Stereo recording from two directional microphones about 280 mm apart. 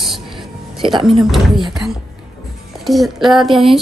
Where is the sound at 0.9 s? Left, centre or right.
Centre.